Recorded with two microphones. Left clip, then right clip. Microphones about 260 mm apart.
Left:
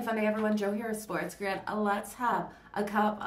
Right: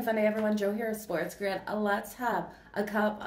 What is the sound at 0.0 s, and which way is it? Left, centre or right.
Speech, centre.